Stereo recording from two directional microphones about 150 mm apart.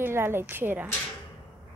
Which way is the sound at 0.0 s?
15° right (ahead or behind).